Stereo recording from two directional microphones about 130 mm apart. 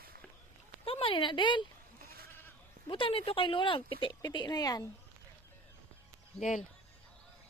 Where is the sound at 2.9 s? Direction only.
40° left (ahead or behind).